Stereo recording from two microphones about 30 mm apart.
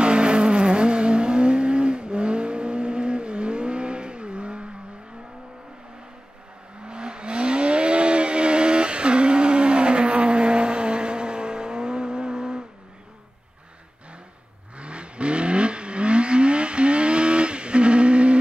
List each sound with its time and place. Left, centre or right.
0.0 s vehicle: right
6.8 s vehicle: right
14.8 s vehicle: right